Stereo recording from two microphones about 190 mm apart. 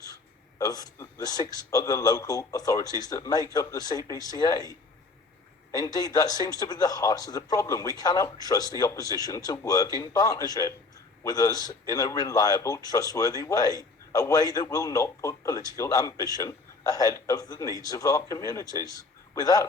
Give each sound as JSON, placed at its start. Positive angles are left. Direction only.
{"t": 0.6, "sound": "a man's voice", "side_deg": 20}